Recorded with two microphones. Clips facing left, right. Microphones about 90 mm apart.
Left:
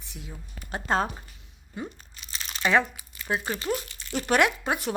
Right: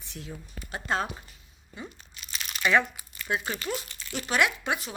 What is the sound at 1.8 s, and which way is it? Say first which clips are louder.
Speech: left 5 dB; 50° left (ahead or behind).